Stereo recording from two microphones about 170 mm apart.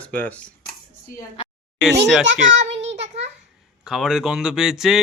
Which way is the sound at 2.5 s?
90° right.